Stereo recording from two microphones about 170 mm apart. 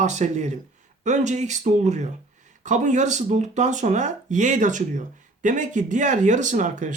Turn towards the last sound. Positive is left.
turn(degrees=-45)  # may be behind; listen again after turning